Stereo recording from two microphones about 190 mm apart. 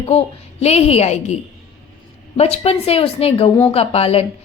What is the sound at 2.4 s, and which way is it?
A woman's voice, 35° left (ahead or behind).